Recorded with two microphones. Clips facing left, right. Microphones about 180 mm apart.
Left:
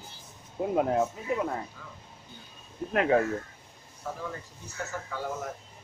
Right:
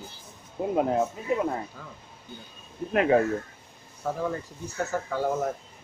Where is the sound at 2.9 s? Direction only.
5° right (ahead or behind).